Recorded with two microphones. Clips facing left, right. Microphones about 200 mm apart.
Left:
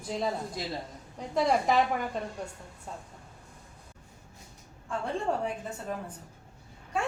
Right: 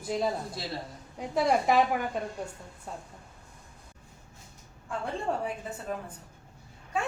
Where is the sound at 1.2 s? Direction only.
5° right (ahead or behind).